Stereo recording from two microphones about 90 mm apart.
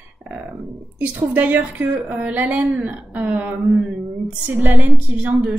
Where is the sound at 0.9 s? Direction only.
20° right (ahead or behind).